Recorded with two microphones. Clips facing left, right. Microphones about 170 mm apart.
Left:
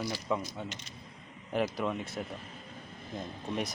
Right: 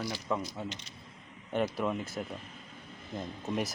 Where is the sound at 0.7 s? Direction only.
45° left (ahead or behind).